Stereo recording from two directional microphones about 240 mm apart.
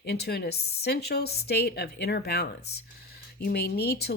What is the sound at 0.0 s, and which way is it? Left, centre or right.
Speech, left.